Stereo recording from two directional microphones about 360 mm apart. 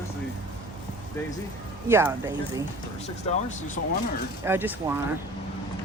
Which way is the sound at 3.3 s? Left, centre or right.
Centre.